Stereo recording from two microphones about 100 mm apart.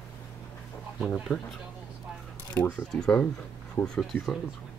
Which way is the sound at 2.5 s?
20° left (ahead or behind).